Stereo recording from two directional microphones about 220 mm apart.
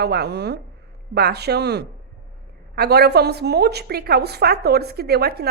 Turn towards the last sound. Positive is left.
turn(degrees=-45)  # may be behind; listen again after turning